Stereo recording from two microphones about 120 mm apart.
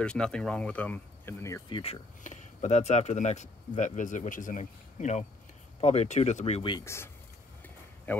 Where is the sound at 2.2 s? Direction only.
90° left.